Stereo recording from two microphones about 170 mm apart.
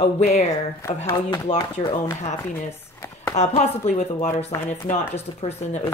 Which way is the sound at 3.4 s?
40° left (ahead or behind).